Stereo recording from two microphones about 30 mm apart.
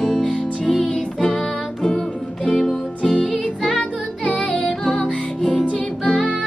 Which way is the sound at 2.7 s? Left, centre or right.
Left.